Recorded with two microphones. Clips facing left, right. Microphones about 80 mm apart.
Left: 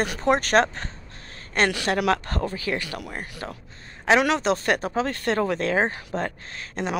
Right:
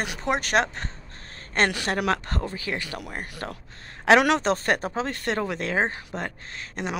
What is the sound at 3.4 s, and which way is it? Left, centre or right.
Speech, right.